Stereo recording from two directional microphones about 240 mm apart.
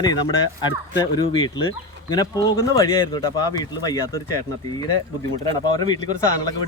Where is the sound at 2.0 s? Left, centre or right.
Centre.